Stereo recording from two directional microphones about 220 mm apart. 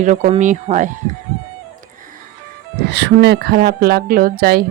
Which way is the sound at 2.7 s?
50° right (ahead or behind).